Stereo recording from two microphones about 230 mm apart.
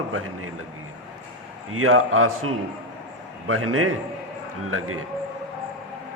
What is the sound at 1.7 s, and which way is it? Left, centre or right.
Speech, right.